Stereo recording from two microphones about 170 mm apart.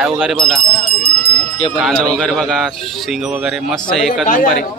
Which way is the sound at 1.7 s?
5° left (ahead or behind).